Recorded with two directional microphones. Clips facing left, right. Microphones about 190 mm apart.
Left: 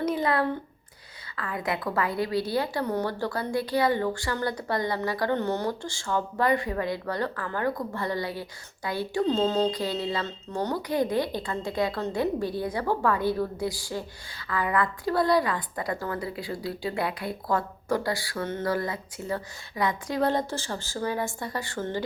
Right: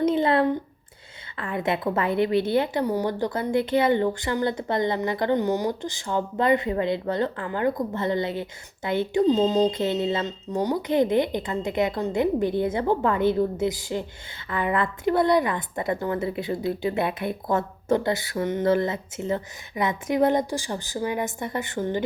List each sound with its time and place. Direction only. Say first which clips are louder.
0.0 s a sound: right 5 dB; 25° right (ahead or behind)
1.4 s a woman's voice: right 4 dB; 25° right (ahead or behind)
2.8 s a woman's voice: right 3 dB; 10° right (ahead or behind)
9.2 s mantra: right 3 dB; 15° right (ahead or behind)
10.5 s mantra: right 4 dB; 10° right (ahead or behind)
10.8 s a woman's voice: right 5 dB; 20° right (ahead or behind)